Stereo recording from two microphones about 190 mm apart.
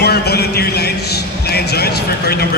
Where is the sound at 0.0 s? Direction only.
60° left (ahead or behind).